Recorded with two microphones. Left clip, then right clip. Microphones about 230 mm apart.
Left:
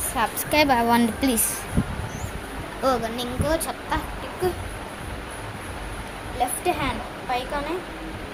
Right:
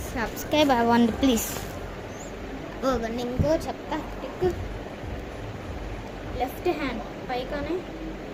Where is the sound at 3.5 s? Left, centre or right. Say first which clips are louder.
Left 3 dB; centre.